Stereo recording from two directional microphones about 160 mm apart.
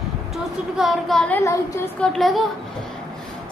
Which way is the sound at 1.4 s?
20° left (ahead or behind).